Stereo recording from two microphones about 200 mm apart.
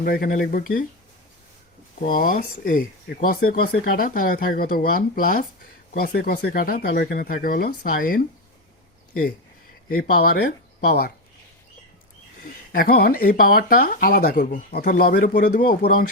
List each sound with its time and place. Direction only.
0.0 s speech: 45° left (ahead or behind)
2.0 s speech: 45° left (ahead or behind)
9.9 s speech: 45° left (ahead or behind)
12.5 s speech: 45° left (ahead or behind)